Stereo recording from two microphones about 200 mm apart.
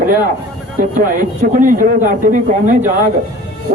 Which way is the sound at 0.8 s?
45° right (ahead or behind).